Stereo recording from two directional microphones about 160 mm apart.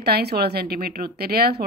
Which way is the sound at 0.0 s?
85° right.